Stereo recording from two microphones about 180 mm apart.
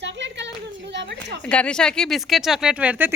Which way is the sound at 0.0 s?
75° right (ahead or behind).